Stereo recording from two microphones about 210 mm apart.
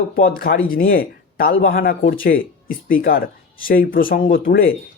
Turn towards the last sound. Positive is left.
turn(degrees=45)  # may be behind; listen again after turning